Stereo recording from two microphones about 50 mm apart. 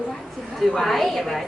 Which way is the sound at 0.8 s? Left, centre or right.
Centre.